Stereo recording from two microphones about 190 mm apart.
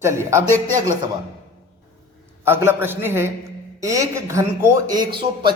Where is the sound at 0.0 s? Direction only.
15° right (ahead or behind).